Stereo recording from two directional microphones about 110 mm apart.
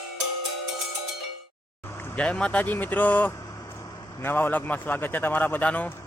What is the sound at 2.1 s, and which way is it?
A man's voice, 10° left (ahead or behind).